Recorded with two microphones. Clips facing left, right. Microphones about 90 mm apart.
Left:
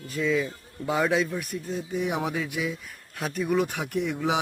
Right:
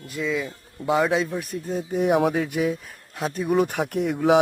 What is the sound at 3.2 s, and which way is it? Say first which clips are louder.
Speech: right 4 dB; 30° right (ahead or behind).